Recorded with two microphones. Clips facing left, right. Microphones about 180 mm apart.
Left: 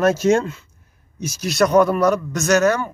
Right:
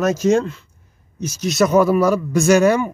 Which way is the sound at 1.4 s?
Centre (ahead or behind).